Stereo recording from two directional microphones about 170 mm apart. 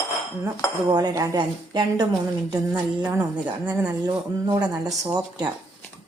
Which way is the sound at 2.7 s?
15° right (ahead or behind).